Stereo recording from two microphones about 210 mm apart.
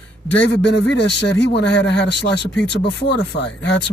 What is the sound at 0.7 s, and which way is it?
Speech, 55° left (ahead or behind).